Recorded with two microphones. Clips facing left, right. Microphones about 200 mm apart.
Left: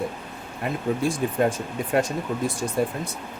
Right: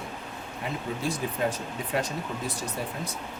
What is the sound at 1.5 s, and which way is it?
Speech, 45° left (ahead or behind).